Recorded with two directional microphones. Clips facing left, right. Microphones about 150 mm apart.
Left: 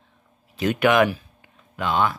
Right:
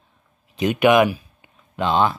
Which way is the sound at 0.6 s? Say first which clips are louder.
Right 3 dB; 20° right (ahead or behind).